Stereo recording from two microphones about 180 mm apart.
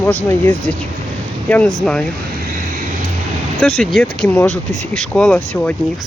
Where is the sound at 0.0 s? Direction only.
10° left (ahead or behind).